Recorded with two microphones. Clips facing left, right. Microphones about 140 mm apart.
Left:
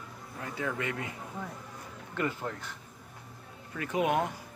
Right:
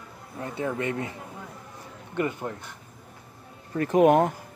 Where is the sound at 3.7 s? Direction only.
45° right (ahead or behind).